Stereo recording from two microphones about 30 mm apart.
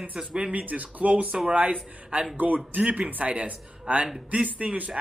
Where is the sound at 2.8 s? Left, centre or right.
Right.